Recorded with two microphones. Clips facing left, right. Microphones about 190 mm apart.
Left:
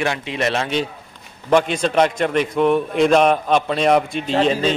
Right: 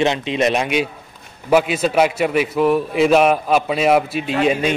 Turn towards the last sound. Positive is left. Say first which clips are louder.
# even
turn(degrees=-10)  # may be behind; listen again after turning